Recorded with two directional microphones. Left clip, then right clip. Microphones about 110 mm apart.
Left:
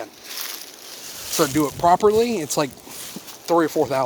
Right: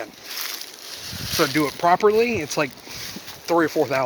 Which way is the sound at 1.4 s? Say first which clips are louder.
Left 1 dB; 35° left (ahead or behind).